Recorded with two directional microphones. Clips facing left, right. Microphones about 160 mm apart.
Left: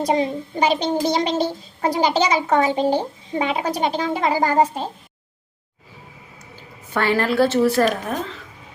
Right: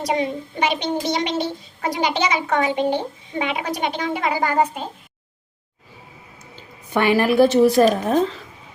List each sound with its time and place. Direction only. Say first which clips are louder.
0.1 s a child's voice: right 1 dB; 35° left (ahead or behind)
6.6 s a woman's voice: right 3 dB; 15° right (ahead or behind)